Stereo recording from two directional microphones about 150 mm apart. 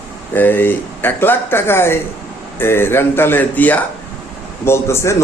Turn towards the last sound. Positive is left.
turn(degrees=20)  # may be behind; listen again after turning